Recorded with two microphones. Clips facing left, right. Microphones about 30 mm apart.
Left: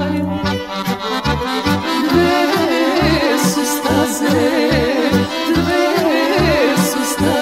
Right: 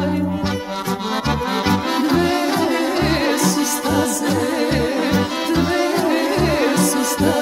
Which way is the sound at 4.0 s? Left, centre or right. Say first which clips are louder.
Left 4 dB; left.